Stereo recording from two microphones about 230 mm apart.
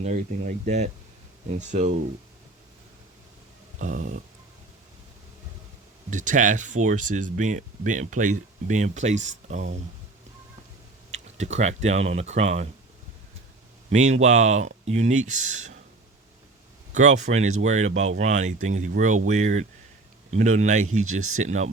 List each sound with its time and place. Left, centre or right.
0.0 s speech: right
3.8 s speech: right
6.1 s speech: right
11.1 s speech: right
13.9 s speech: right
16.9 s speech: right
21.0 s speech: right
21.4 s speech: right